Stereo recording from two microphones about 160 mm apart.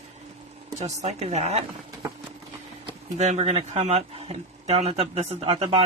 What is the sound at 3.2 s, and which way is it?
Speech, 45° right (ahead or behind).